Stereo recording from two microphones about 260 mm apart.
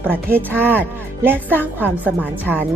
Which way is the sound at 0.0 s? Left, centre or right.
Centre.